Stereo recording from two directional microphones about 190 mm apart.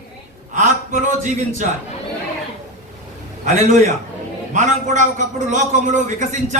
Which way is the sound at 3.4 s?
40° right (ahead or behind).